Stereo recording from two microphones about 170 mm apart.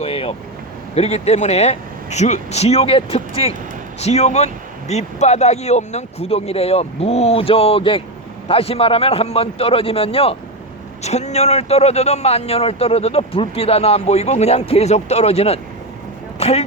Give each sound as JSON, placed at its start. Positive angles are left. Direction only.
{"t": 0.0, "sound": "vehicle", "side_deg": 35}
{"t": 0.9, "sound": "a man's voice", "side_deg": 40}